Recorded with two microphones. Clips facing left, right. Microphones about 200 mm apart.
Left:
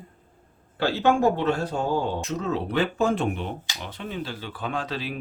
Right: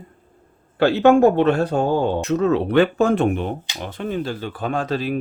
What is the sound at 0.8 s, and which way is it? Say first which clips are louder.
Speech: right 8 dB; 65° right (ahead or behind).